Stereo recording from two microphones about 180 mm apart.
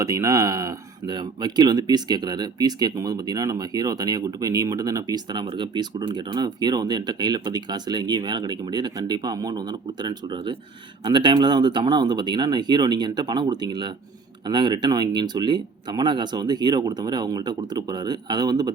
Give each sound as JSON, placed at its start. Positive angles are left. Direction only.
{"t": 0.0, "sound": "speech", "side_deg": -15}